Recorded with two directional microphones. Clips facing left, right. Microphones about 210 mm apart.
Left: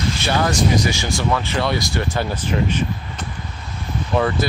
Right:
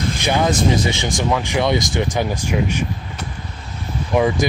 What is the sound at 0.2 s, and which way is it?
Speech, 15° right (ahead or behind).